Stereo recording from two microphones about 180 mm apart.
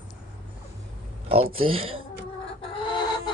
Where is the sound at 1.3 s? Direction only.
30° right (ahead or behind).